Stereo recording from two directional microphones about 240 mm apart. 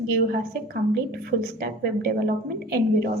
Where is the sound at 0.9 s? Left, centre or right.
Right.